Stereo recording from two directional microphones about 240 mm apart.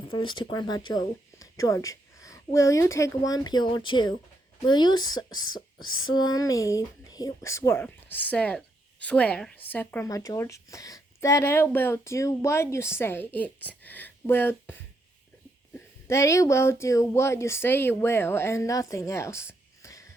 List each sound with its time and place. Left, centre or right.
0.1 s a woman's voice: centre
5.8 s a sound: left
6.1 s speech: centre